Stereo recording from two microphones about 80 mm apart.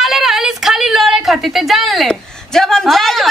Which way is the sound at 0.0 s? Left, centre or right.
Centre.